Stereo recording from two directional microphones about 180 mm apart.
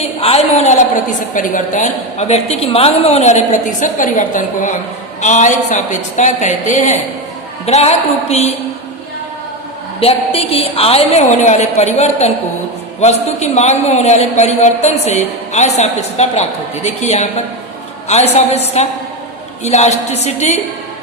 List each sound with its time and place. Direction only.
0.2 s a sound: 35° left (ahead or behind)
1.3 s a man's voice: 45° left (ahead or behind)
10.0 s a man's voice: 35° left (ahead or behind)
19.6 s a man's voice: 40° left (ahead or behind)